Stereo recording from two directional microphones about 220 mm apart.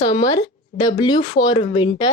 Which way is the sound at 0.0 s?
35° left (ahead or behind).